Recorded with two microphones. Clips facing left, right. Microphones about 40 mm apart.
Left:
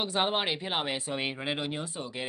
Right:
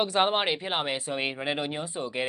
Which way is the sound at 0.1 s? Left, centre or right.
Centre.